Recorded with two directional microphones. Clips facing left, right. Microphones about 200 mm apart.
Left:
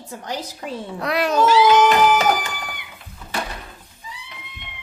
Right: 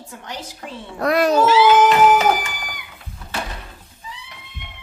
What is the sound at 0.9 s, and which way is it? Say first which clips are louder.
Speech: right 5 dB; 45° right (ahead or behind).